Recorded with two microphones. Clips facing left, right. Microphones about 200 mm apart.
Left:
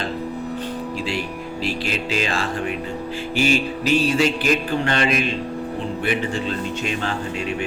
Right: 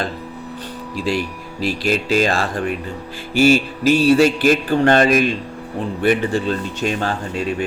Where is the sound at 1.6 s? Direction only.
40° right (ahead or behind).